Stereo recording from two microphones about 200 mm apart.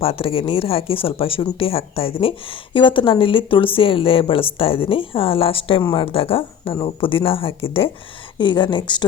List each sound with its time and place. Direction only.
0.0 s speech: 30° left (ahead or behind)